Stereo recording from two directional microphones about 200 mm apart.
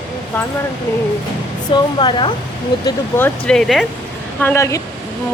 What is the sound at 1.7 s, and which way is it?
Speech, 25° left (ahead or behind).